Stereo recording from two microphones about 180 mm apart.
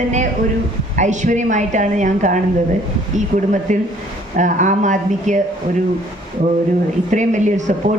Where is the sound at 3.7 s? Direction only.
40° right (ahead or behind).